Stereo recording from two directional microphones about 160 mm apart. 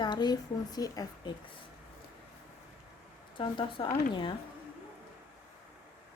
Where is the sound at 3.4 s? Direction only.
30° left (ahead or behind).